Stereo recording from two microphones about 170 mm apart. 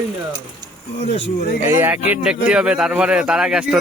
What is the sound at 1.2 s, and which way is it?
Speech, 60° left (ahead or behind).